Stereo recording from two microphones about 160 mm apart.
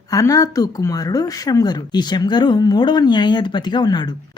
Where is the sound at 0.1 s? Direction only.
20° left (ahead or behind).